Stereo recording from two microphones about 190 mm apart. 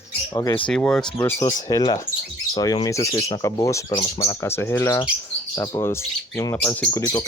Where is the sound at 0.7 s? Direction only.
5° left (ahead or behind).